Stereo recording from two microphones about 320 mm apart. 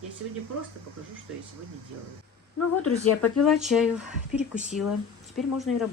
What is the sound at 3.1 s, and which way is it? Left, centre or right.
Speech, left.